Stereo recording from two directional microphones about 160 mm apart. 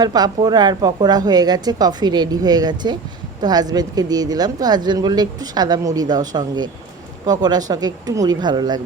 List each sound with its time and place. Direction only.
0.0 s a woman's voice: 25° right (ahead or behind)